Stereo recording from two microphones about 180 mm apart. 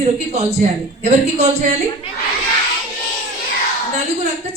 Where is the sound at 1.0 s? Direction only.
35° right (ahead or behind).